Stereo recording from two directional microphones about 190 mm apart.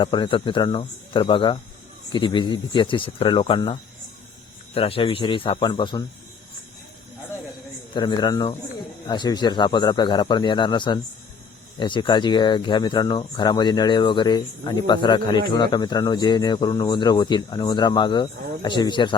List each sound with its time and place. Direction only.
0.0 s speech: 25° left (ahead or behind)
7.9 s speech: 25° left (ahead or behind)